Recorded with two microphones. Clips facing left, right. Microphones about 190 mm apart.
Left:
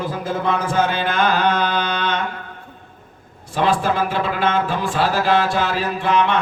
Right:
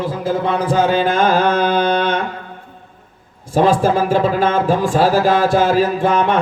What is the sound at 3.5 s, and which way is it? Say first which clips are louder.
A man's voice: right 5 dB; 45° right (ahead or behind).